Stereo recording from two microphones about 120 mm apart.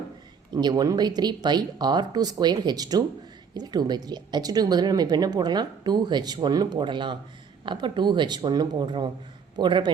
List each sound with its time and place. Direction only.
0.5 s speech: 35° right (ahead or behind)